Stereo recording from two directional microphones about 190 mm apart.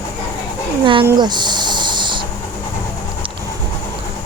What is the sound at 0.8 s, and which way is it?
Speech, 25° right (ahead or behind).